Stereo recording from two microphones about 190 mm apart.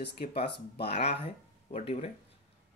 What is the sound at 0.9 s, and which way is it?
Speech, 35° left (ahead or behind).